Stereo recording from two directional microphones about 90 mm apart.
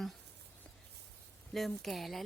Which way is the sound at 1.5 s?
Centre (ahead or behind).